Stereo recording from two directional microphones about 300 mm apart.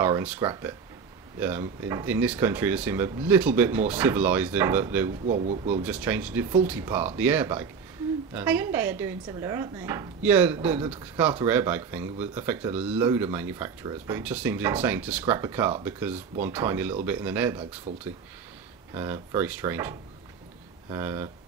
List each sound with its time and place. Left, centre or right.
0.0 s speech: centre
5.2 s speech: right
5.9 s speech: centre
17.9 s speech: right
18.9 s speech: centre